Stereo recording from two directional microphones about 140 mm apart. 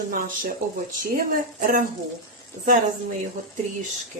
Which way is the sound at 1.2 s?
90° right.